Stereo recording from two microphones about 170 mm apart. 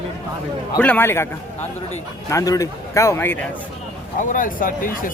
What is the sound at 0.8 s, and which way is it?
Speech, 10° left (ahead or behind).